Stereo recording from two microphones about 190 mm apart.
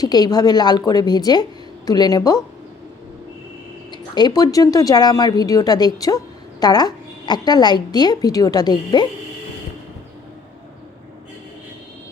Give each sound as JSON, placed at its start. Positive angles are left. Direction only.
{"t": 0.0, "sound": "a woman's voice", "side_deg": 20}
{"t": 3.9, "sound": "a woman's voice", "side_deg": 20}